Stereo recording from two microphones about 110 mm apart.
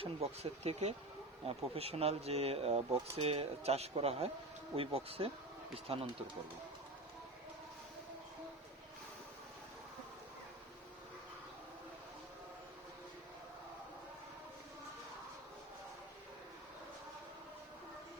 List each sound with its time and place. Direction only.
0.0 s speech: 65° right (ahead or behind); by 0.9 s 85° right
1.5 s speech: 60° right (ahead or behind)